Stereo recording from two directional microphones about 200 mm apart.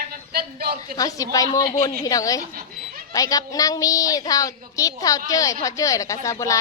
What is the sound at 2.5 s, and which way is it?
Goat, 45° right (ahead or behind).